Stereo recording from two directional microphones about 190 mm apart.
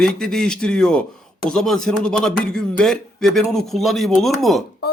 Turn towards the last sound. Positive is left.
turn(degrees=0)  # may be behind; listen again after turning